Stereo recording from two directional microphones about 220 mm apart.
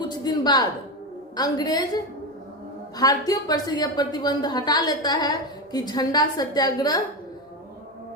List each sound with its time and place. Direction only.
0.0 s a man's voice: 20° left (ahead or behind)
3.0 s a woman's voice: 15° left (ahead or behind)